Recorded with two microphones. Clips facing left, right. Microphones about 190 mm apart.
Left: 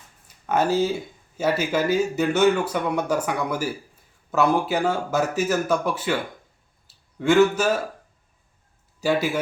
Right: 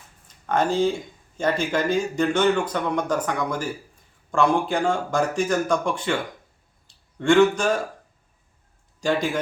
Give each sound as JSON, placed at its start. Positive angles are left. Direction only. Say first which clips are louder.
{"t": 0.3, "sound": "speech", "louder": "left 1 dB", "side_deg": 10}
{"t": 6.8, "sound": "a sound", "louder": "right 1 dB", "side_deg": 5}
{"t": 9.0, "sound": "a man's voice", "louder": "left 1 dB", "side_deg": 5}